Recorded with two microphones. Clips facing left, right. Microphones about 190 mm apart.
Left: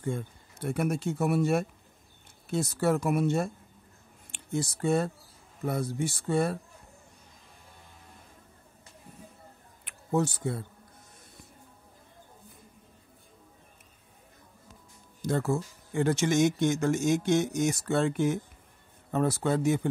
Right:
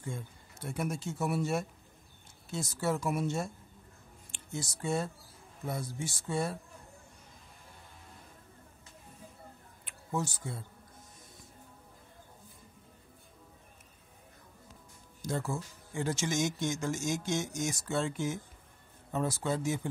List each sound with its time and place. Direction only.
0.0 s speech: 60° left (ahead or behind)
9.8 s a sound: 60° left (ahead or behind)
15.2 s speech: 60° left (ahead or behind)